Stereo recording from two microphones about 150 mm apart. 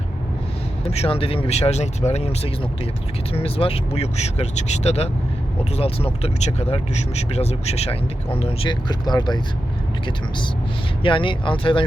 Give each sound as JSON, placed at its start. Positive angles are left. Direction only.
{"t": 0.9, "sound": "speech", "side_deg": 40}